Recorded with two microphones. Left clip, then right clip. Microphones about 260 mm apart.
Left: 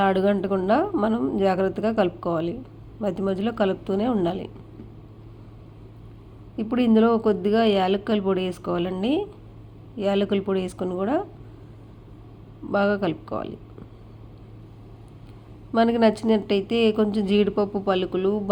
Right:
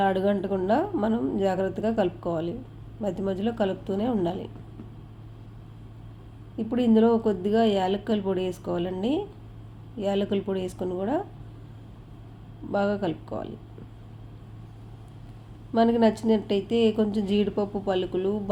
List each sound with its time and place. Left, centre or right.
0.0 s a woman's voice: centre
6.6 s a woman's voice: centre
12.7 s a woman's voice: centre
15.7 s a woman's voice: centre